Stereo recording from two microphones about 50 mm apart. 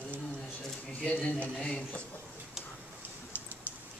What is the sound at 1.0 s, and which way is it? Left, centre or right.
Speech, left.